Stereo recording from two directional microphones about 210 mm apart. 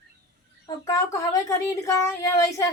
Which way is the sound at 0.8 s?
15° left (ahead or behind).